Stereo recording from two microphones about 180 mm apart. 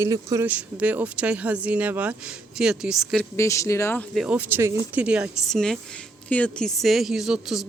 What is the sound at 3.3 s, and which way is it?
Speech, 15° left (ahead or behind).